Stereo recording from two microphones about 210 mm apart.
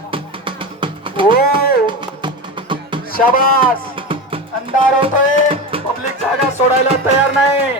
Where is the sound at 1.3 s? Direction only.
45° left (ahead or behind).